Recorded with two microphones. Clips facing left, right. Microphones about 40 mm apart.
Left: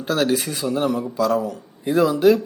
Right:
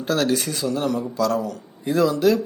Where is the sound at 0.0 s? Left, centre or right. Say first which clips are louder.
Left 1 dB; centre.